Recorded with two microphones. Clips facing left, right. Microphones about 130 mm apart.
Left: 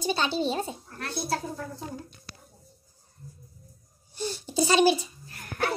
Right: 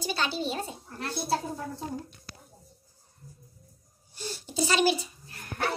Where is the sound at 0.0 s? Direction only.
25° left (ahead or behind).